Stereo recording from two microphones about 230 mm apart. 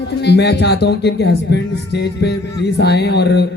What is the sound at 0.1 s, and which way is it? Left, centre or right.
Speech, left.